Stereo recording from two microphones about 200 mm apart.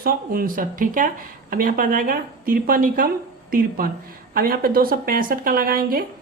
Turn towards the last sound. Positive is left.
turn(degrees=-45)  # may be behind; listen again after turning